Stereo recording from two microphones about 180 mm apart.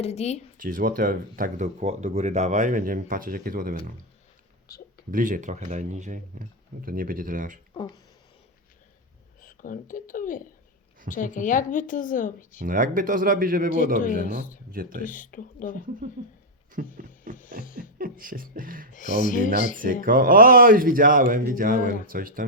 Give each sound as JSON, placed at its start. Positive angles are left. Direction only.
{"t": 0.0, "sound": "speech", "side_deg": 35}
{"t": 0.5, "sound": "speech", "side_deg": -50}
{"t": 5.1, "sound": "speech", "side_deg": -50}
{"t": 7.7, "sound": "speech", "side_deg": 25}
{"t": 9.4, "sound": "speech", "side_deg": 50}
{"t": 12.6, "sound": "speech", "side_deg": -50}
{"t": 14.3, "sound": "speech", "side_deg": 45}
{"t": 14.7, "sound": "speech", "side_deg": -50}
{"t": 15.0, "sound": "speech", "side_deg": 50}
{"t": 16.8, "sound": "speech", "side_deg": -55}
{"t": 17.3, "sound": "a sound", "side_deg": 50}
{"t": 17.9, "sound": "speech", "side_deg": -50}
{"t": 18.9, "sound": "speech", "side_deg": 45}
{"t": 19.7, "sound": "speech", "side_deg": -50}